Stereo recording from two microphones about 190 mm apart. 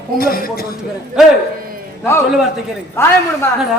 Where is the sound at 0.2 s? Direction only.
50° left (ahead or behind).